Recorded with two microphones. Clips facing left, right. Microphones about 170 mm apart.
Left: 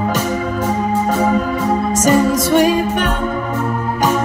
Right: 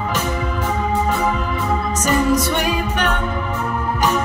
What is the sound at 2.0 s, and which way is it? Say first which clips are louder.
Music: left 3 dB; 45° left (ahead or behind).